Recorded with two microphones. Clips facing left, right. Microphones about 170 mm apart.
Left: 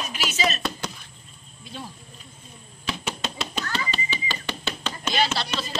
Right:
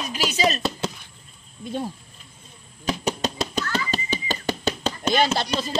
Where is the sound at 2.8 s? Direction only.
40° right (ahead or behind).